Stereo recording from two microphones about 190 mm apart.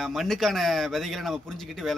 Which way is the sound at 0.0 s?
Centre (ahead or behind).